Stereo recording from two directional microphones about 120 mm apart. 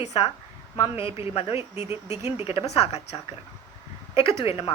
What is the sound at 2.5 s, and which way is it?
A woman's voice, 55° left (ahead or behind).